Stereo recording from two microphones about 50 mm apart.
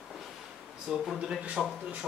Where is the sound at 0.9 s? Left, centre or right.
Centre.